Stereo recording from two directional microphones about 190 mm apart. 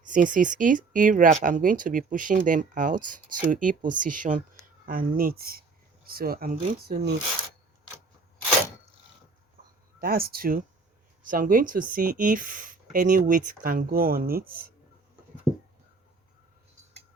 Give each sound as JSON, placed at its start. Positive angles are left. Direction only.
{"t": 0.0, "sound": "speech", "side_deg": -45}
{"t": 10.0, "sound": "speech", "side_deg": -50}